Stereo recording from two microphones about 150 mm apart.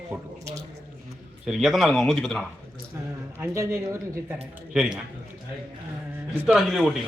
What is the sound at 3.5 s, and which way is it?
Speech, 20° right (ahead or behind).